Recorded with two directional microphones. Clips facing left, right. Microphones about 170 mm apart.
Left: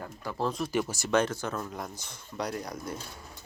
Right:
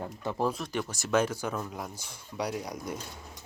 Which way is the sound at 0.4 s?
Centre (ahead or behind).